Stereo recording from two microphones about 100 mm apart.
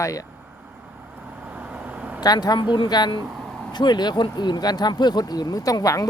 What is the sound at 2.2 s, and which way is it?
Speech, 40° left (ahead or behind).